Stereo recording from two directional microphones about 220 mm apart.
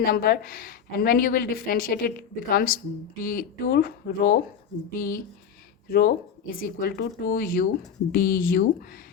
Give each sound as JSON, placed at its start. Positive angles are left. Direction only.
{"t": 0.0, "sound": "a woman's voice", "side_deg": 40}